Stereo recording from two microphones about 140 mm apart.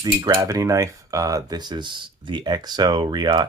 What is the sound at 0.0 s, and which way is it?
Speech, 30° right (ahead or behind).